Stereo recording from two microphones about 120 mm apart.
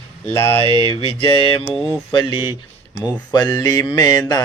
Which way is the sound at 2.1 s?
40° left (ahead or behind).